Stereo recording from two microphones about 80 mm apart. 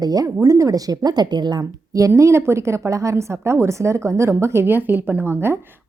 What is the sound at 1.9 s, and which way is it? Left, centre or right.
A woman's voice, right.